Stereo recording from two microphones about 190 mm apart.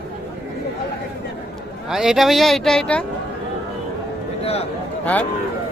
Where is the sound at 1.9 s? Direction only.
Centre (ahead or behind).